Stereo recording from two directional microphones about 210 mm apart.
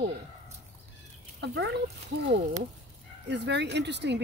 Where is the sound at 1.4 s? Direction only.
55° right (ahead or behind).